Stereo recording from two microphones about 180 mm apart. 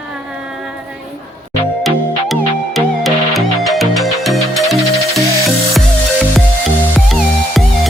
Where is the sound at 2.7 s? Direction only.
Centre (ahead or behind).